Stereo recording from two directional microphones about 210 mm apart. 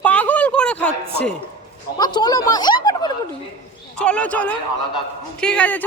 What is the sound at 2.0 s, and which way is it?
Speech, 20° left (ahead or behind).